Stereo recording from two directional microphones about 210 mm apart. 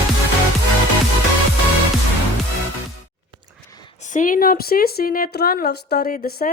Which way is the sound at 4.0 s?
35° left (ahead or behind).